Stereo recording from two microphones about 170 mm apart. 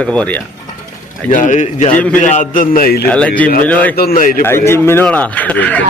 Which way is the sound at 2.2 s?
45° left (ahead or behind).